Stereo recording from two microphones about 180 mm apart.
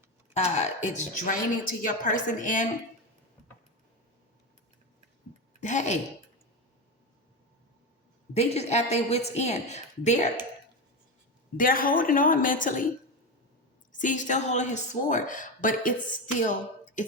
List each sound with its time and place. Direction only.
0.3 s a woman's voice: 40° left (ahead or behind)
5.5 s speech: 40° left (ahead or behind)
8.3 s a woman's voice: 35° left (ahead or behind)
11.5 s a woman's voice: 50° left (ahead or behind)
14.0 s a woman's voice: 45° left (ahead or behind)